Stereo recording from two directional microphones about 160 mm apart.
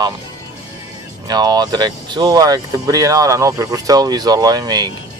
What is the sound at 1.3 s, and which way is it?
Speech, 25° right (ahead or behind).